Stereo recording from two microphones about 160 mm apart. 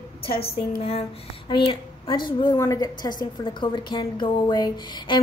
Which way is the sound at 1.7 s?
30° left (ahead or behind).